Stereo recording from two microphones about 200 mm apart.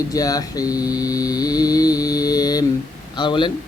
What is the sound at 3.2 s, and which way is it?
Speech, 25° left (ahead or behind).